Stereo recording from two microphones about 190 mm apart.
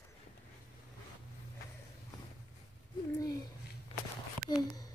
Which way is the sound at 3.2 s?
20° left (ahead or behind).